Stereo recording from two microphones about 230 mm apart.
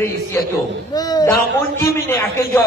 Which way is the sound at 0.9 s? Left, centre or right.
Centre.